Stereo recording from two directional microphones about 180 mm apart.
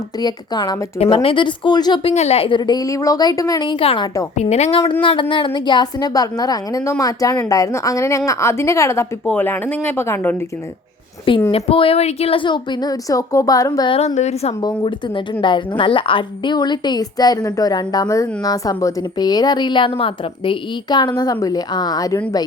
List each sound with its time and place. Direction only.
0.2 s a woman's voice: 20° left (ahead or behind)
2.1 s a woman's voice: 35° left (ahead or behind); by 10.3 s 15° left (ahead or behind)
11.5 s a woman's voice: 30° left (ahead or behind)
14.6 s a woman's voice: 25° left (ahead or behind)